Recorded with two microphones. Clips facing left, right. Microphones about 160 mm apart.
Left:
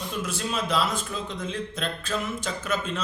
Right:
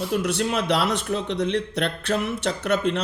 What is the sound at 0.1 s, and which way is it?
A man's voice, 70° right (ahead or behind).